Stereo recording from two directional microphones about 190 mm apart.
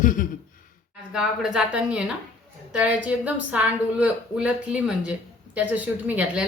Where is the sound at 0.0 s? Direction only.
45° left (ahead or behind).